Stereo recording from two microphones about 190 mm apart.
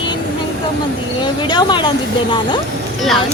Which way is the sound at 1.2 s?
25° left (ahead or behind).